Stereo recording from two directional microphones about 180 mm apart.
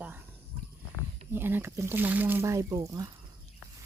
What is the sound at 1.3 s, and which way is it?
Speech, 10° right (ahead or behind).